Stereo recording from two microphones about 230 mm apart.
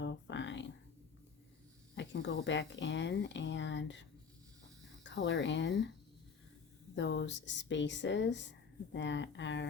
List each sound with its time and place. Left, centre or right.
0.0 s a sound: left
2.0 s speech: left
5.0 s speech: left
6.9 s speech: left